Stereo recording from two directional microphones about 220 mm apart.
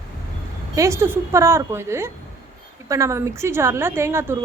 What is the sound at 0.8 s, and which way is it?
A woman's voice, 15° right (ahead or behind).